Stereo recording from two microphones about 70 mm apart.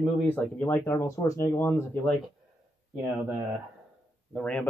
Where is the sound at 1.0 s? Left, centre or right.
Left.